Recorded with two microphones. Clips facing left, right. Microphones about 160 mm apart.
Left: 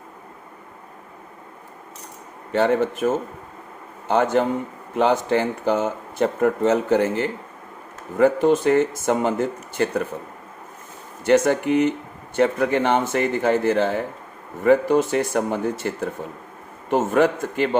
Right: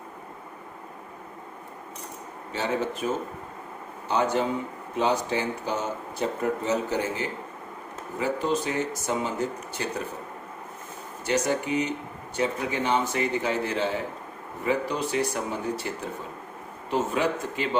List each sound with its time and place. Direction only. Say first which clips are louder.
2.5 s speech: left 9 dB; 55° left (ahead or behind)
11.3 s speech: left 8 dB; 55° left (ahead or behind)